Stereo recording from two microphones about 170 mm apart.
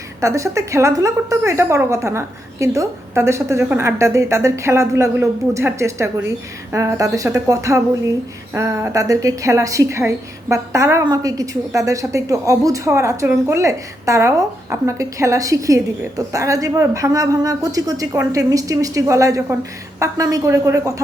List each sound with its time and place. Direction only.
0.2 s a woman's voice: 20° right (ahead or behind)